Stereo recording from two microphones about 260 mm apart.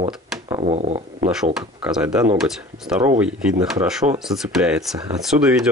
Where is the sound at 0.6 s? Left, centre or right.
Right.